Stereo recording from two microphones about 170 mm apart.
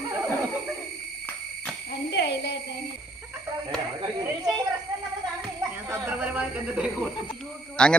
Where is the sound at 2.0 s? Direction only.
85° left.